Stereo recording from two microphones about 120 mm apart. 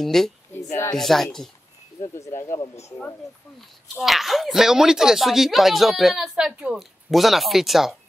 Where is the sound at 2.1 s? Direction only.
25° left (ahead or behind).